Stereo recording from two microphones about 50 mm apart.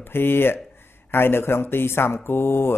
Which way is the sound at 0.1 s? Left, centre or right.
Left.